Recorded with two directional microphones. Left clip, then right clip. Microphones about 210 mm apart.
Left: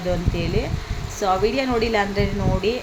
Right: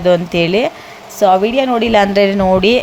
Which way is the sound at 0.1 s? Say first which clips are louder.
Right 13 dB; 45° right (ahead or behind).